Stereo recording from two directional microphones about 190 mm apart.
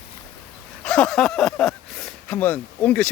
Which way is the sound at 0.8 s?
5° left (ahead or behind).